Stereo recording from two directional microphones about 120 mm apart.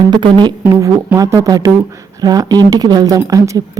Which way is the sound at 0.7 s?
25° right (ahead or behind).